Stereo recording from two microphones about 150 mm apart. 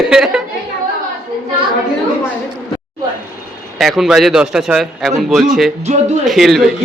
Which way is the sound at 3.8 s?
Centre (ahead or behind).